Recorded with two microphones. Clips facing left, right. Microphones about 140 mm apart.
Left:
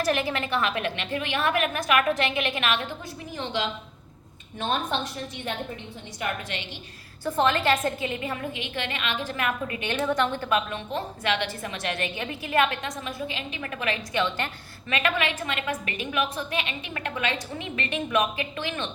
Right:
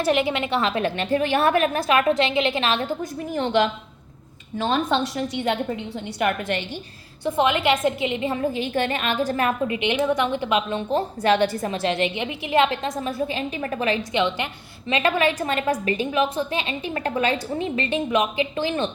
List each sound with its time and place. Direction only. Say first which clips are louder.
0.0 s a woman's voice: right 5 dB; 20° right (ahead or behind)
3.3 s a woman's voice: right 9 dB; 55° right (ahead or behind)
4.6 s a woman's voice: right 6 dB; 90° right
6.1 s a woman's voice: right 8 dB; 65° right (ahead or behind)
7.3 s a woman's voice: right 3 dB; 15° right (ahead or behind)
8.5 s a woman's voice: right 9 dB; 40° right (ahead or behind)
9.6 s a woman's voice: right 5 dB; 20° right (ahead or behind)
10.8 s a woman's voice: right 8 dB; 40° right (ahead or behind)
14.2 s a woman's voice: right 4 dB; 15° right (ahead or behind)
14.9 s a woman's voice: right 6 dB; 35° right (ahead or behind)